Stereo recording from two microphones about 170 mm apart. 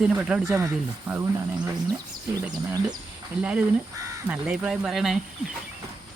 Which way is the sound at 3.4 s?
5° right (ahead or behind).